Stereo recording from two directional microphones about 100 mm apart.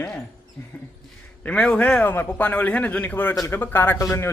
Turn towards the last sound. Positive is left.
turn(degrees=25)  # may be behind; listen again after turning